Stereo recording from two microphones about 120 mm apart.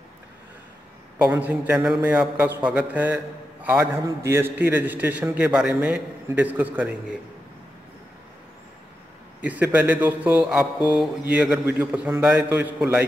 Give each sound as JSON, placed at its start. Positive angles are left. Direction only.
{"t": 1.1, "sound": "a man's voice", "side_deg": -10}
{"t": 9.4, "sound": "a man's voice", "side_deg": -15}